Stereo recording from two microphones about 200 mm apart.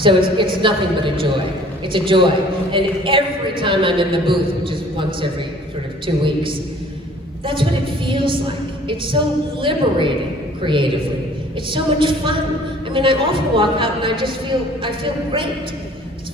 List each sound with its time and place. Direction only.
0.0 s a man's voice: 25° right (ahead or behind)
7.4 s a man's voice: 25° right (ahead or behind)